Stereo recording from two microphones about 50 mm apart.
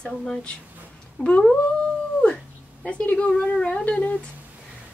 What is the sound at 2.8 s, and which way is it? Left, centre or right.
Speech, left.